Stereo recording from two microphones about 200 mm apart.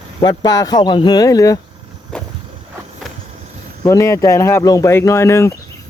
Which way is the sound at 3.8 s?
15° left (ahead or behind).